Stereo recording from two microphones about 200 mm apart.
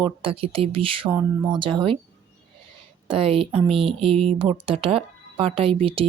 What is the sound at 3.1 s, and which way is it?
Speech, 30° right (ahead or behind).